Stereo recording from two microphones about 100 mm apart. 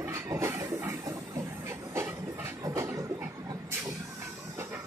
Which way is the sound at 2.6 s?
30° right (ahead or behind).